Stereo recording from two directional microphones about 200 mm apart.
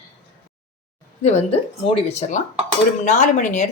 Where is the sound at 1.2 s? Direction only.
30° left (ahead or behind).